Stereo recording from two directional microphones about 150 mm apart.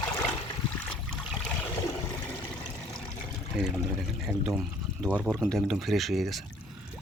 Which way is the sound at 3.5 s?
5° right (ahead or behind).